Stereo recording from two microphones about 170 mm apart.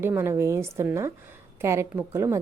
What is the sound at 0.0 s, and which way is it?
Speech, 15° right (ahead or behind).